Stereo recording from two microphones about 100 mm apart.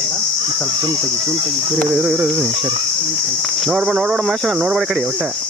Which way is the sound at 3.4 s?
Centre (ahead or behind).